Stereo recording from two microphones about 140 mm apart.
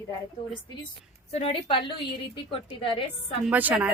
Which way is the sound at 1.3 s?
45° left (ahead or behind).